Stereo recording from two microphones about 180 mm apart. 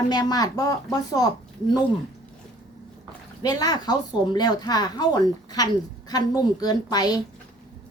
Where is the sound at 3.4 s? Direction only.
20° left (ahead or behind).